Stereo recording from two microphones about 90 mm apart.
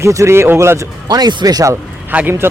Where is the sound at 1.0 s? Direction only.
55° right (ahead or behind).